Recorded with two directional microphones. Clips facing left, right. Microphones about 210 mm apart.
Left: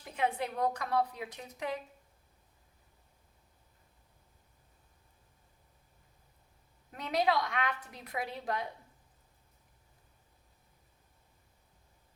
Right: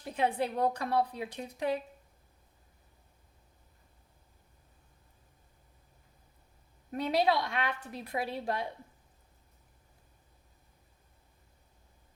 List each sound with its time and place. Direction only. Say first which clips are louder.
0.2 s a woman's voice: right 3 dB; 30° right (ahead or behind)
6.9 s a woman's voice: right 2 dB; 30° right (ahead or behind)